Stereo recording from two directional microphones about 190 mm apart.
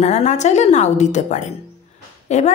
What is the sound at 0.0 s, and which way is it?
A woman's voice, 35° left (ahead or behind).